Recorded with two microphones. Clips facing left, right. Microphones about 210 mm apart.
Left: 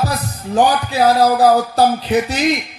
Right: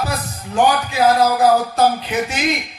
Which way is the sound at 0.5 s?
35° left (ahead or behind).